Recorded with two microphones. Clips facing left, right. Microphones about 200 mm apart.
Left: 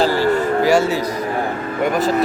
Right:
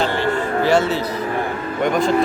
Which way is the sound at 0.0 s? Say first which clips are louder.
Left 4 dB; 35° left (ahead or behind).